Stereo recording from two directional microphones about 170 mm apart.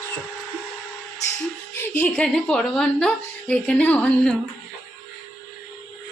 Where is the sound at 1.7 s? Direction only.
10° left (ahead or behind).